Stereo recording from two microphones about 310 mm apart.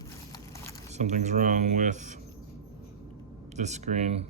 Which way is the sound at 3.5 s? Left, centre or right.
Right.